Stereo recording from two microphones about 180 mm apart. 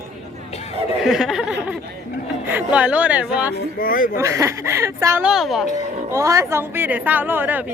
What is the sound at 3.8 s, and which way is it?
Speech, 50° left (ahead or behind).